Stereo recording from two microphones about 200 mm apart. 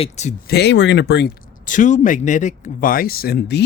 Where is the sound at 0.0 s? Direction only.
35° left (ahead or behind).